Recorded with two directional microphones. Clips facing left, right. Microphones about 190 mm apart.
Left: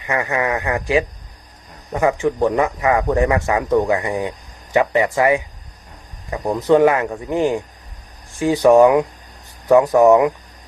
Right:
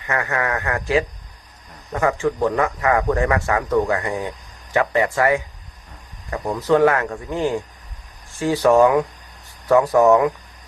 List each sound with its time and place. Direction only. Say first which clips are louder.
0.0 s a man's voice: left 3 dB; 15° left (ahead or behind)